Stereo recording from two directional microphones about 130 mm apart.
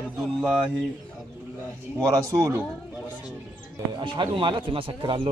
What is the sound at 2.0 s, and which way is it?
Speech, 30° right (ahead or behind).